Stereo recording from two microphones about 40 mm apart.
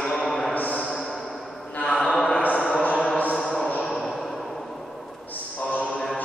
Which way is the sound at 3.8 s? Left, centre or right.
Centre.